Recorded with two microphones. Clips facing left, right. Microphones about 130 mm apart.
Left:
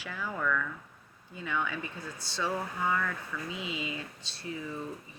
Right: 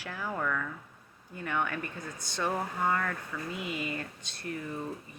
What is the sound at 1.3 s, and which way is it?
Speech, 55° right (ahead or behind).